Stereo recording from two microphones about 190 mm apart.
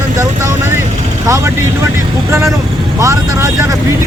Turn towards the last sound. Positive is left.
turn(degrees=-15)  # may be behind; listen again after turning